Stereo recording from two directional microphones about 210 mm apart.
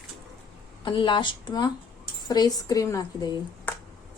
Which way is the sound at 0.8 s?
20° left (ahead or behind).